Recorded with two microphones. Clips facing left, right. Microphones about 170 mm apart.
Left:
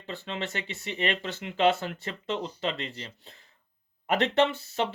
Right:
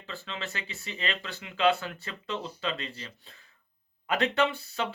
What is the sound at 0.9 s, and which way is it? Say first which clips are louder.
Speech: left 5 dB; 35° left (ahead or behind).